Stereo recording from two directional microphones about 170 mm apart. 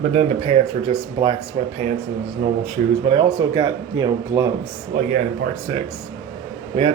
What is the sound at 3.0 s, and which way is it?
Speech, 25° right (ahead or behind).